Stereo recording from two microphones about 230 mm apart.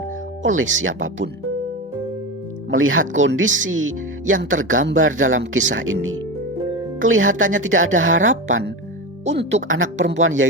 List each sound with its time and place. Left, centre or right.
0.4 s speech: right
2.6 s speech: right